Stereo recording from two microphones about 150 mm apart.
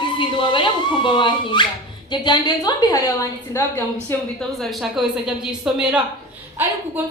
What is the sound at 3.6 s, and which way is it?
Speech, 15° left (ahead or behind).